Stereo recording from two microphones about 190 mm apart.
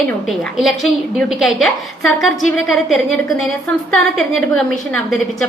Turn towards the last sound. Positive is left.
turn(degrees=0)  # may be behind; listen again after turning